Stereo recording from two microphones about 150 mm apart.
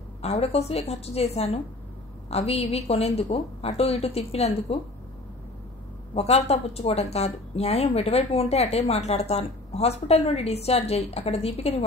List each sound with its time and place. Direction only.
0.2 s a woman's voice: 45° left (ahead or behind)
6.1 s a woman's voice: 45° left (ahead or behind)